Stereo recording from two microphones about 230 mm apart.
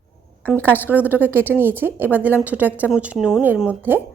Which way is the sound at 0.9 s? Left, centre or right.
Centre.